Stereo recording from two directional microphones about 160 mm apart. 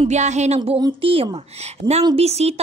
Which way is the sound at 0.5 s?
25° right (ahead or behind).